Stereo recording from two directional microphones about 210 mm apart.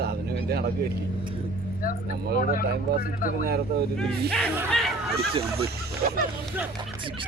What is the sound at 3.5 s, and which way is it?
Speech, 50° right (ahead or behind).